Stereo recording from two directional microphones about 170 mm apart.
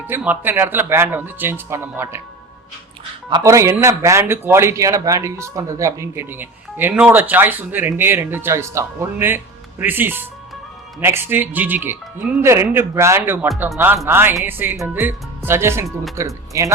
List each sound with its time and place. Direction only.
0.1 s speech: 10° right (ahead or behind)
3.2 s speech: 20° right (ahead or behind)